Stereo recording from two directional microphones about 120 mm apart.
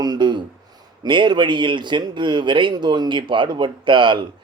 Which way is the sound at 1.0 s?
40° right (ahead or behind).